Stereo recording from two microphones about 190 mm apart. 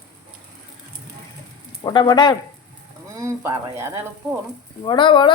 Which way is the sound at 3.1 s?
15° right (ahead or behind).